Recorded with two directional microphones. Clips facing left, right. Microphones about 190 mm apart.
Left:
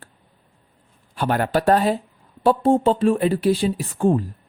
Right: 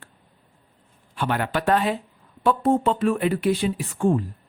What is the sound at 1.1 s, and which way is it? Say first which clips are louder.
Speech: left 4 dB; 40° left (ahead or behind).